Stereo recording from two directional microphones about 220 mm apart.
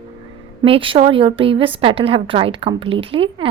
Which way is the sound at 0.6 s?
25° right (ahead or behind).